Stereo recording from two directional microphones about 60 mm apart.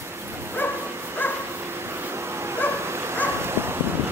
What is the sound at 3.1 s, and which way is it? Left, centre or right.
Dog, right.